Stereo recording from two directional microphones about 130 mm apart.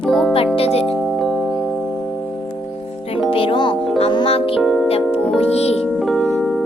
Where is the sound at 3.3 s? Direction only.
45° left (ahead or behind).